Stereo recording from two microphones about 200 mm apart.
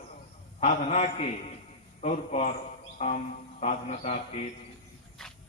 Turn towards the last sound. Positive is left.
turn(degrees=35)  # may be behind; listen again after turning